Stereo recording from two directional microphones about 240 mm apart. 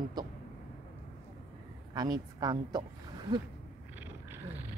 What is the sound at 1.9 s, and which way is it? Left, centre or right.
Speech, centre.